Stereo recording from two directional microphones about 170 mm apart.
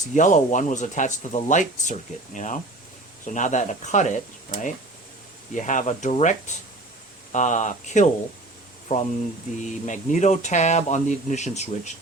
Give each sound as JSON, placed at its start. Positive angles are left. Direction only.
{"t": 0.1, "sound": "speech", "side_deg": 50}
{"t": 7.3, "sound": "speech", "side_deg": 45}